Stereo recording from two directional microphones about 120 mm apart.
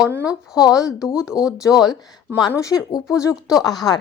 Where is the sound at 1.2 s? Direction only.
5° right (ahead or behind).